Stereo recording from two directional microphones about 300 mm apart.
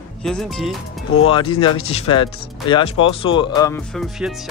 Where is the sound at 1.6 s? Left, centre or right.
Centre.